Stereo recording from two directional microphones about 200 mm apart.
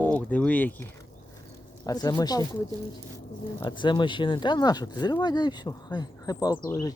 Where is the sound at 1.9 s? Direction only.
20° left (ahead or behind).